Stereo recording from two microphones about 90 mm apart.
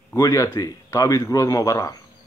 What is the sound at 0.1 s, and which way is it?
A man's voice, 35° left (ahead or behind).